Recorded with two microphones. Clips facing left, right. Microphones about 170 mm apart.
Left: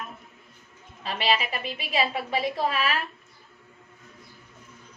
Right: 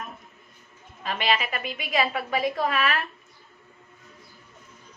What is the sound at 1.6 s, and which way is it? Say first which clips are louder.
A woman's voice: right 1 dB; 30° left (ahead or behind).